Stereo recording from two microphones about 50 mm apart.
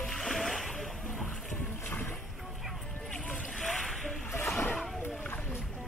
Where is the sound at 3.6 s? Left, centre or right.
Centre.